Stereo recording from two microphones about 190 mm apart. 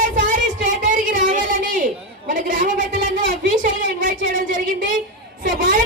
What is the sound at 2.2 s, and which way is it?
Speech, 45° right (ahead or behind).